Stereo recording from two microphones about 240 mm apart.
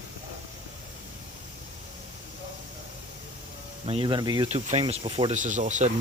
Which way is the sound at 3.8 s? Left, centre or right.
Right.